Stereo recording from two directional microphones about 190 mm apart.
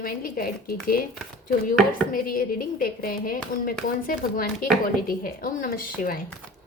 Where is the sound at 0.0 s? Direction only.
50° left (ahead or behind).